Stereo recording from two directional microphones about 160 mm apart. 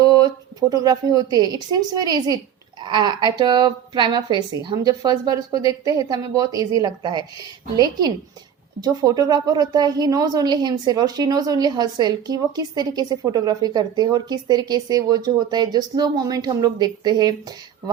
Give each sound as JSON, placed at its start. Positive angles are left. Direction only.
{"t": 0.0, "sound": "a sound", "side_deg": -25}
{"t": 0.7, "sound": "a woman's voice", "side_deg": -25}
{"t": 8.8, "sound": "a woman's voice", "side_deg": -25}